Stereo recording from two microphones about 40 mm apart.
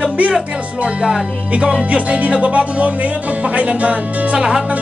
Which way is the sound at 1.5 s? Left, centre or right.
Right.